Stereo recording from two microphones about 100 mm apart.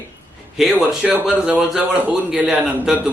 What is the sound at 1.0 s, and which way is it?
A man's voice, 15° right (ahead or behind).